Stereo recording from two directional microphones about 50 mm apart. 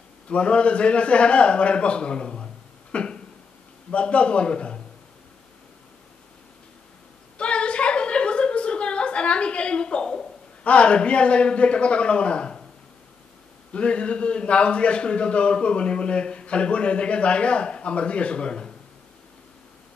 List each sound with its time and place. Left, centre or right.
0.3 s a man's voice: left
7.3 s a sound: left
10.6 s speech: left
13.7 s speech: left